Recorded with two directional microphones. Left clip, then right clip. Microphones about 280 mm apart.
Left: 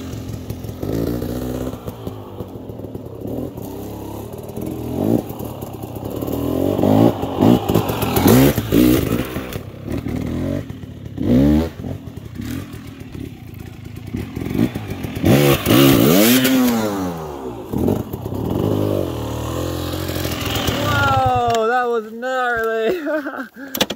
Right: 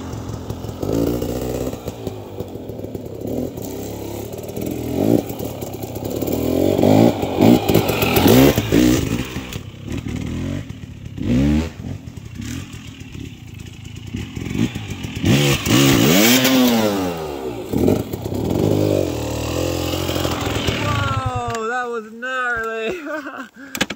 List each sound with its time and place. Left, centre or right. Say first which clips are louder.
0.5 s motorcycle: right 3 dB; right
4.6 s motorcycle: right 2 dB; right
8.8 s vehicle: left 2 dB; centre
14.1 s vehicle: left 3 dB; centre; by 20.2 s right
20.9 s a sound: left 7 dB; left